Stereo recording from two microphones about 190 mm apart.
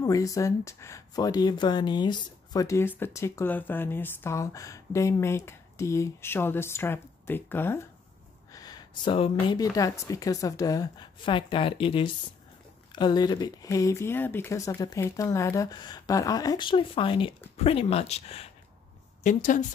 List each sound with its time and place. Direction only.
0.0 s a woman's voice: 15° left (ahead or behind); by 19.6 s 40° left (ahead or behind)